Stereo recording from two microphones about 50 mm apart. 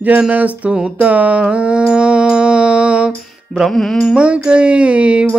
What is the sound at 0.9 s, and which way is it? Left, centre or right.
Mantra, right.